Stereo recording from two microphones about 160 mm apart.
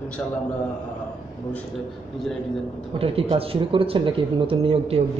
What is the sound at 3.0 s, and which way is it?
Speech, 35° right (ahead or behind).